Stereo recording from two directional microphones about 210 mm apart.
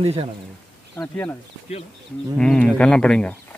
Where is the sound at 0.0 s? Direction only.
25° right (ahead or behind).